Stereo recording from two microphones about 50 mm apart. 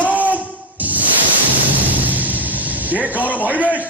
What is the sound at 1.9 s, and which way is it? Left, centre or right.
Music, right.